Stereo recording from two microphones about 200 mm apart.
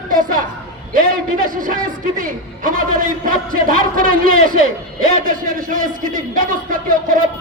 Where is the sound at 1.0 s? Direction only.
45° right (ahead or behind).